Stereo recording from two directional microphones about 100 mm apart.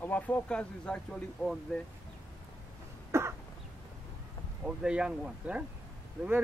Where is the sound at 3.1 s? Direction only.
25° right (ahead or behind).